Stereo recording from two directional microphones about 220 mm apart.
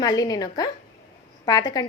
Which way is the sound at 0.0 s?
15° left (ahead or behind).